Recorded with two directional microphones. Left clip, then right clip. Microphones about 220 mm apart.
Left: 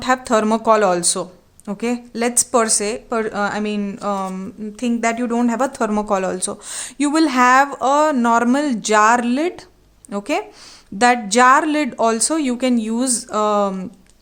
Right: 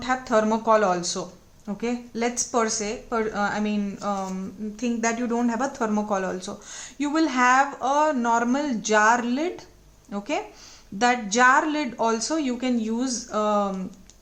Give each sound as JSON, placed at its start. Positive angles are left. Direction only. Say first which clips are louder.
{"t": 0.0, "sound": "a woman's voice", "louder": "left 5 dB", "side_deg": 50}